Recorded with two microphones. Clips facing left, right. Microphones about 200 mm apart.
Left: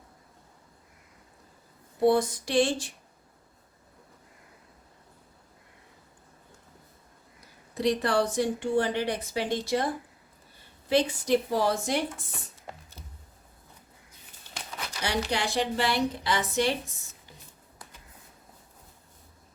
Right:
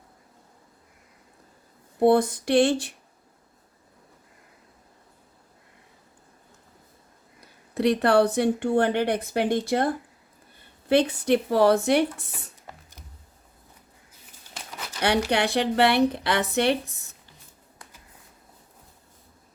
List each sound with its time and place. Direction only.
2.0 s speech: 55° right (ahead or behind)
7.7 s speech: 65° right (ahead or behind)
15.0 s speech: 65° right (ahead or behind)